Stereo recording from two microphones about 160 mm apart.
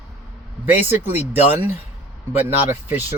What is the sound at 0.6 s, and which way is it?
Speech, 15° right (ahead or behind).